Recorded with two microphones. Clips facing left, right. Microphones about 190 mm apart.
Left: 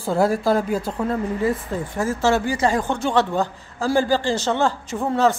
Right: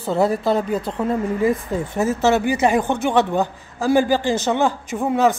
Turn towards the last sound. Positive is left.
turn(degrees=-15)  # may be behind; listen again after turning